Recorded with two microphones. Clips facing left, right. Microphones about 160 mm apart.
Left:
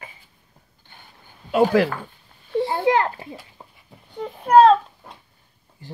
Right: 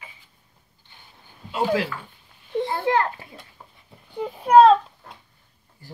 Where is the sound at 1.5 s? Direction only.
55° left (ahead or behind).